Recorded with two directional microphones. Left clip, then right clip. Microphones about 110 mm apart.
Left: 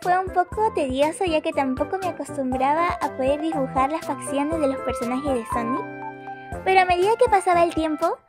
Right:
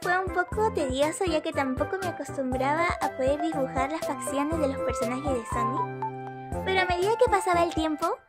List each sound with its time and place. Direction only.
0.4 s speech: 20° left (ahead or behind)